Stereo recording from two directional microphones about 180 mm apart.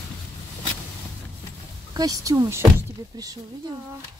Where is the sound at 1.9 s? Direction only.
20° right (ahead or behind).